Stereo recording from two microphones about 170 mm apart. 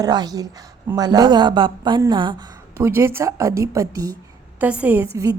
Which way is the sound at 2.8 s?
15° right (ahead or behind).